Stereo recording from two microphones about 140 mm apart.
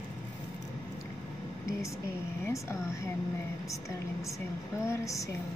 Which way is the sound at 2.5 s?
20° left (ahead or behind).